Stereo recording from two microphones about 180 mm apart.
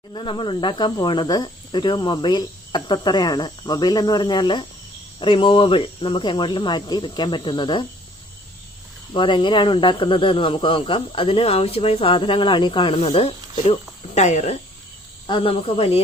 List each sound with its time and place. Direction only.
0.1 s speech: 25° left (ahead or behind)
9.1 s speech: 25° left (ahead or behind)